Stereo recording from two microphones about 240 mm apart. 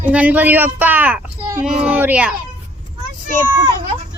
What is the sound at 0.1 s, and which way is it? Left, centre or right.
Speech, centre.